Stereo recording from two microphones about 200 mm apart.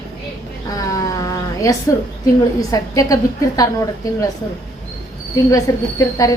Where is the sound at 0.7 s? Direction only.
15° left (ahead or behind).